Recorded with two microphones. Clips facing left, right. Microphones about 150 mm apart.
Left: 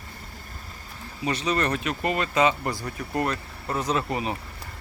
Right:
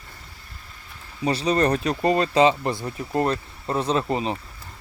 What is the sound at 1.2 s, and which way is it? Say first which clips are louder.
Speech: right 5 dB; 35° right (ahead or behind).